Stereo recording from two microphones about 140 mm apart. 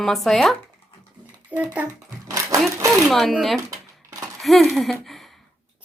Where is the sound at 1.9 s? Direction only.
25° right (ahead or behind).